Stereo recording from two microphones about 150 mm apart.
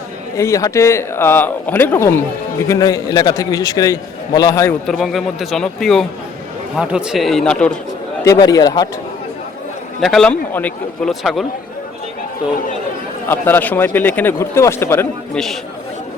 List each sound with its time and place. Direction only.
0.3 s a man's voice: 20° left (ahead or behind)
4.9 s a man's voice: centre (ahead or behind)
8.2 s a man's voice: 20° left (ahead or behind)
10.0 s a man's voice: centre (ahead or behind)
13.2 s speech: 15° left (ahead or behind)